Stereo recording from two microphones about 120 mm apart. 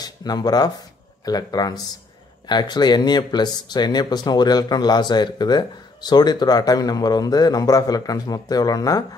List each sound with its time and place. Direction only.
0.0 s speech: 35° left (ahead or behind)